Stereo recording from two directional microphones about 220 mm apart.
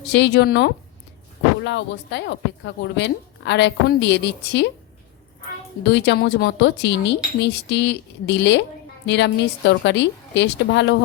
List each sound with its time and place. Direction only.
0.1 s speech: 50° left (ahead or behind)
5.8 s speech: 50° left (ahead or behind)